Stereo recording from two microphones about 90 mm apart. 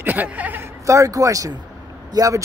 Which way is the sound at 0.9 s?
35° right (ahead or behind).